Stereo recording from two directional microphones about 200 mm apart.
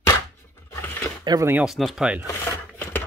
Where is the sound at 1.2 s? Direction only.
15° right (ahead or behind).